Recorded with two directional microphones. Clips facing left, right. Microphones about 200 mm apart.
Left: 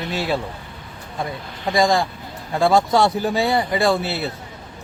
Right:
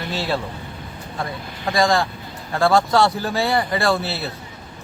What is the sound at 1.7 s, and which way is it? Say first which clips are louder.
Speech: left 1 dB; 20° left (ahead or behind).